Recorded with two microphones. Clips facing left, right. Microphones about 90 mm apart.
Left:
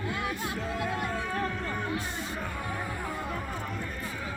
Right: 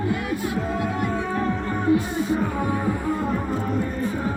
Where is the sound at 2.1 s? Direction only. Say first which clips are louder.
Right 13 dB; 5° right (ahead or behind).